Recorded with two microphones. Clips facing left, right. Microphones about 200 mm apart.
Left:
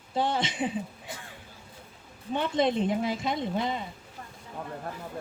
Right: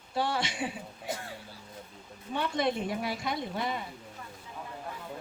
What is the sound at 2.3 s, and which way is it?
Speech, 20° left (ahead or behind).